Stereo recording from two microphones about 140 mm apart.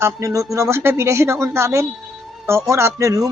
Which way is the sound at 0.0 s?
20° right (ahead or behind).